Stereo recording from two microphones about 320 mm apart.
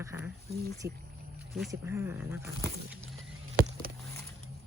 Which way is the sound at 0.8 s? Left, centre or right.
Right.